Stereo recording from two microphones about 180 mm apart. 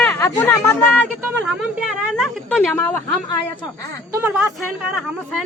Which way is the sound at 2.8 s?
10° left (ahead or behind).